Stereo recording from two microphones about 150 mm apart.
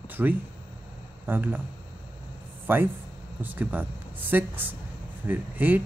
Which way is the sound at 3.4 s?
10° right (ahead or behind).